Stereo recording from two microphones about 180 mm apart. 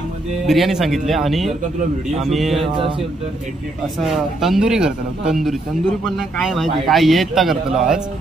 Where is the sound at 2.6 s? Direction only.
30° right (ahead or behind).